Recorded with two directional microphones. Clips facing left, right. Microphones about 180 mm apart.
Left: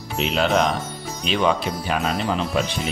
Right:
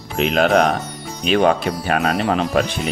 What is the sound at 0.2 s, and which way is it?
Speech, 55° right (ahead or behind).